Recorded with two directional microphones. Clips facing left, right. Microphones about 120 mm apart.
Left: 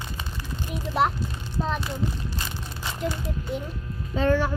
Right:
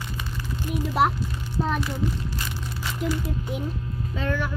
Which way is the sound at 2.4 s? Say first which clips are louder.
Right 2 dB; 25° left (ahead or behind).